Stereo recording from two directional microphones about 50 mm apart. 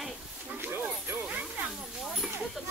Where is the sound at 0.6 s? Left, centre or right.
Right.